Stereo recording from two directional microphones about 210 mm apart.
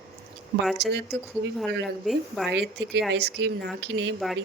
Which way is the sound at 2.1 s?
Centre (ahead or behind).